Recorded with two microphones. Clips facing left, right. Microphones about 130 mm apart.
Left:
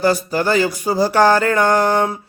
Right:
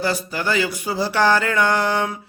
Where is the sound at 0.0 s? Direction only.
40° left (ahead or behind).